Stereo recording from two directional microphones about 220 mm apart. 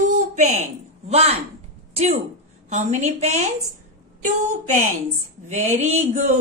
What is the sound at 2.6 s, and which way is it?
Speech, 35° right (ahead or behind).